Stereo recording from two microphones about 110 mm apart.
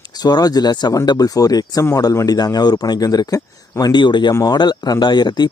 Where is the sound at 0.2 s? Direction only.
35° left (ahead or behind).